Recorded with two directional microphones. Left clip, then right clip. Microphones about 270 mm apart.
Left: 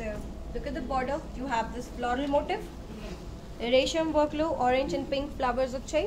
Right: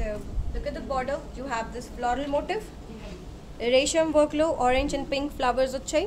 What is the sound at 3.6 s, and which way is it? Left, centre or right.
A woman's voice, right.